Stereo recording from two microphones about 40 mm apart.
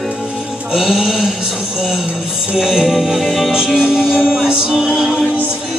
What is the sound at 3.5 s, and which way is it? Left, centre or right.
Music, centre.